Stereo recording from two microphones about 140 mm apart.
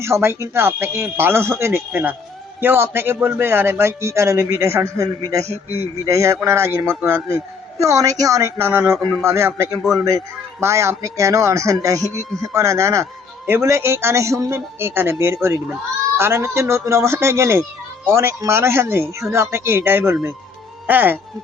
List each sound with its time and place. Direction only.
0.0 s a man's voice: 20° right (ahead or behind)